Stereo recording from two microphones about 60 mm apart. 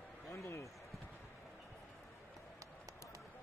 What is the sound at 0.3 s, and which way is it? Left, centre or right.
Basketball bounce, left.